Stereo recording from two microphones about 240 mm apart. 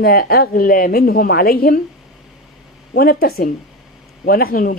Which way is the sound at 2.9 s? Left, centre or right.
Left.